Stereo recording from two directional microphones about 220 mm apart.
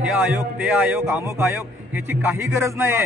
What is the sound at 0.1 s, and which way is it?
A man's voice, centre (ahead or behind).